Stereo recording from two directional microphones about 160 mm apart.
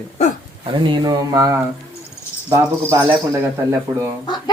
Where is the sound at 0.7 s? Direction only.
30° right (ahead or behind).